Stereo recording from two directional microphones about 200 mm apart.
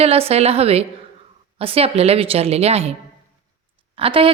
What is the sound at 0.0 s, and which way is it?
A woman's voice, 30° right (ahead or behind).